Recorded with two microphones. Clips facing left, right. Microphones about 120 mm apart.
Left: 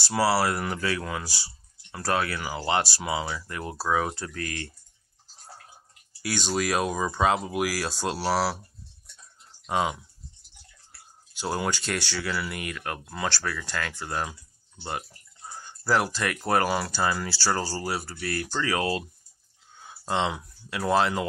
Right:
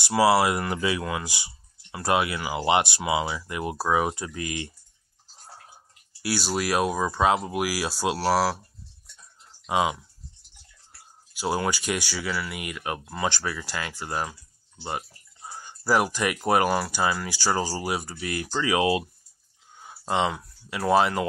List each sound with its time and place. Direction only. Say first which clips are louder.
0.2 s speech: right 4 dB; 15° right (ahead or behind)
0.6 s speech: right 2 dB; 5° right (ahead or behind)
1.2 s speech: right 2 dB; 15° right (ahead or behind)
6.2 s speech: right 1 dB; 10° right (ahead or behind)
9.7 s speech: right 2 dB; 10° right (ahead or behind)
11.3 s speech: right 2 dB; 5° right (ahead or behind)
19.8 s a sound: right 2 dB; 5° right (ahead or behind)
20.3 s speech: even; 5° right (ahead or behind)